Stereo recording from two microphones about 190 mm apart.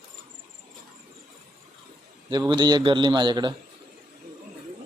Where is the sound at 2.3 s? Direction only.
25° right (ahead or behind).